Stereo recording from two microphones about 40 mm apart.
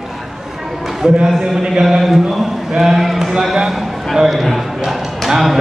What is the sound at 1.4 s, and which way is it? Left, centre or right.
Mantra, centre.